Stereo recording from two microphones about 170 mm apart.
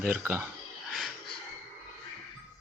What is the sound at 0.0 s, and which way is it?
Speech, 10° right (ahead or behind).